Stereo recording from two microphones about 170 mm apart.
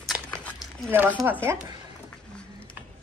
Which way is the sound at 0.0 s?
5° left (ahead or behind).